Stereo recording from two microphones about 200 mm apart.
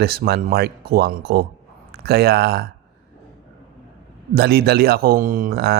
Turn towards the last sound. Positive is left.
turn(degrees=-50)  # may be behind; listen again after turning